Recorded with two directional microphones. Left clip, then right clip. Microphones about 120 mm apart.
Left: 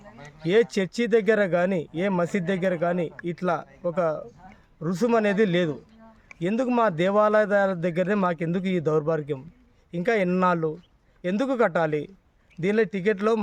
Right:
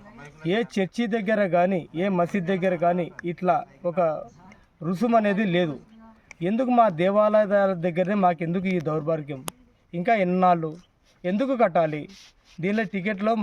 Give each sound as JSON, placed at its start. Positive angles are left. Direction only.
{"t": 0.4, "sound": "a man's voice", "side_deg": 35}